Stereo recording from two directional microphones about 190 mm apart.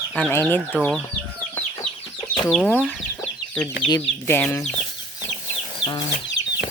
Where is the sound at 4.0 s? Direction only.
10° left (ahead or behind).